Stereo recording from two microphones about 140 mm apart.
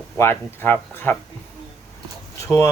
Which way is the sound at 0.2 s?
15° left (ahead or behind).